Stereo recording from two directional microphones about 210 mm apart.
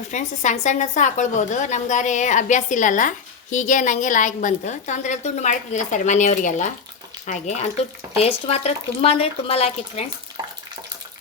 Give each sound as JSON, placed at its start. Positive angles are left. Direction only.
{"t": 0.1, "sound": "a woman's voice", "side_deg": 35}